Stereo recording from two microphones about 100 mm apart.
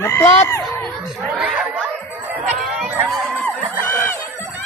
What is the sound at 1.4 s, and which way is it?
Speech, 10° right (ahead or behind).